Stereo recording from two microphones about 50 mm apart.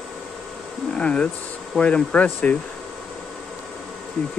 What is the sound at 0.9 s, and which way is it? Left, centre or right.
Speech, left.